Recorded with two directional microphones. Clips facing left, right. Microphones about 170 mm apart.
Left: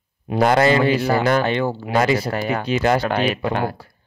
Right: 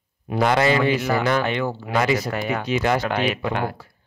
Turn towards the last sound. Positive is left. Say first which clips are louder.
# left 3 dB
turn(degrees=35)  # may be behind; listen again after turning